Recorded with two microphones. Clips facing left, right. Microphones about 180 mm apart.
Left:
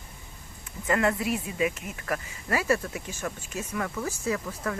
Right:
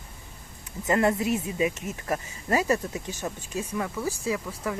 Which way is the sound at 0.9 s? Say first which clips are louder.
Right 2 dB; 25° right (ahead or behind).